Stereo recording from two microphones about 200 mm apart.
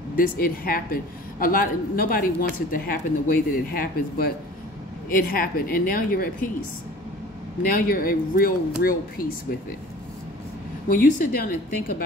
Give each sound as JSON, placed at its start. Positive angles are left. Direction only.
{"t": 0.1, "sound": "a man's voice", "side_deg": 45}
{"t": 7.6, "sound": "a man's voice", "side_deg": 45}
{"t": 10.9, "sound": "a man's voice", "side_deg": 40}